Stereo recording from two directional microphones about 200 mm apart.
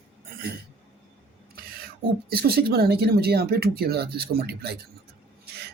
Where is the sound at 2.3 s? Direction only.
50° right (ahead or behind).